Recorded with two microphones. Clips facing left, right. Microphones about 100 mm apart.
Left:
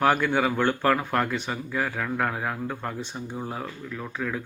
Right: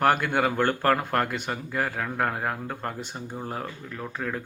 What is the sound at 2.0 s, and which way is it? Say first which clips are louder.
Speech: even; 35° right (ahead or behind).